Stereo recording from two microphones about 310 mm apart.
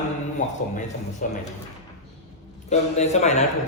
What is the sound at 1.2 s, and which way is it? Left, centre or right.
Speech, left.